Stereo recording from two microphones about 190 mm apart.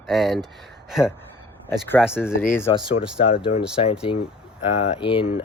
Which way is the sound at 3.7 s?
30° left (ahead or behind).